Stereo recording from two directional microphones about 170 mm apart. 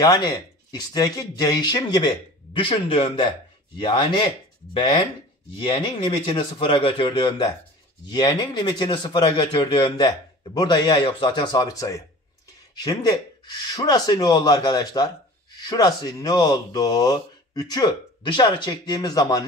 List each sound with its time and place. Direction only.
0.0 s speech: 25° left (ahead or behind)
5.8 s speech: 30° left (ahead or behind)